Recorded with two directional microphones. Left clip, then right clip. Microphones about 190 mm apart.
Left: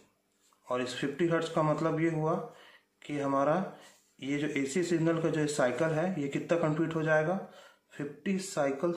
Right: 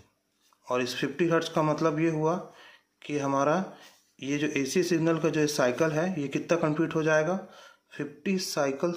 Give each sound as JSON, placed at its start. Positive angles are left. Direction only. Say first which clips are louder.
{"t": 0.7, "sound": "a man's voice", "louder": "right 4 dB", "side_deg": -30}